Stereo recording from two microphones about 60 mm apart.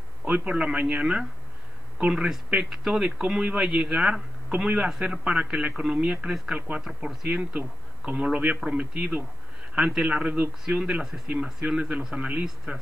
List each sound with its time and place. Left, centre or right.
0.2 s a man's voice: right
2.2 s a man's voice: centre; by 10.5 s right
10.8 s speech: centre